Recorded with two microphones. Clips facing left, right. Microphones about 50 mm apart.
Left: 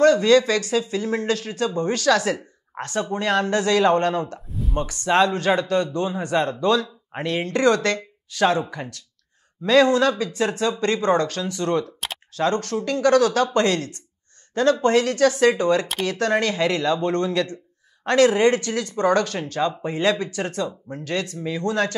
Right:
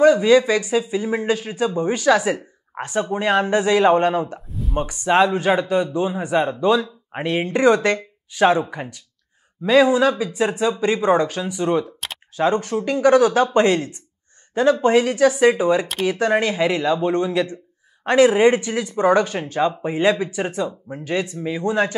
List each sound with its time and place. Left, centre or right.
0.0 s speech: centre
4.5 s speech: centre
4.7 s speech: centre